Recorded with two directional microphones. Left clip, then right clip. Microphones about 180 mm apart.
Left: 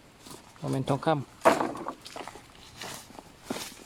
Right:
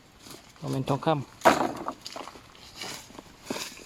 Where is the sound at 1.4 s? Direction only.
45° right (ahead or behind).